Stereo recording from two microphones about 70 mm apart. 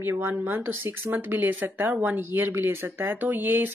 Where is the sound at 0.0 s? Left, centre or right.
Right.